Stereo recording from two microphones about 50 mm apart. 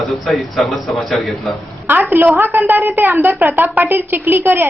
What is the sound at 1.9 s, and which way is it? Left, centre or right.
A woman's voice, right.